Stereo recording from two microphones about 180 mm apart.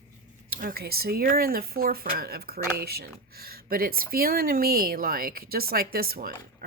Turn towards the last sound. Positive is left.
turn(degrees=-55)  # may be behind; listen again after turning